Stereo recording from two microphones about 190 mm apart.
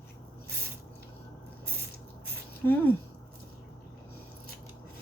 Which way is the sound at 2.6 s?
10° left (ahead or behind).